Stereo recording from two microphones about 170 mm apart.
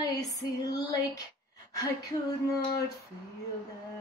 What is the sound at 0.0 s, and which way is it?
Female singing, 20° left (ahead or behind).